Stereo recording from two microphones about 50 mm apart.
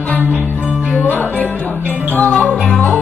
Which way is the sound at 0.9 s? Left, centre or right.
Left.